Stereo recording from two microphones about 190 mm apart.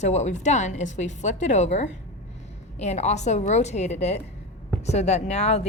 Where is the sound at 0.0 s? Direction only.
35° left (ahead or behind).